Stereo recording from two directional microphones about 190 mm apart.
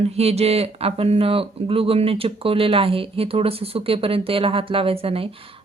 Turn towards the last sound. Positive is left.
turn(degrees=-30)  # may be behind; listen again after turning